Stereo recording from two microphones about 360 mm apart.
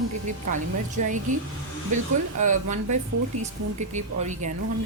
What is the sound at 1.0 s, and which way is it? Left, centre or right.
A woman's voice, right.